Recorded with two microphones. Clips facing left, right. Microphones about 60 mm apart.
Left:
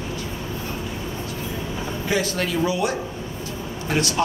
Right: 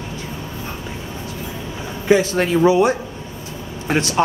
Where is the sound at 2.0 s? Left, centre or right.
Right.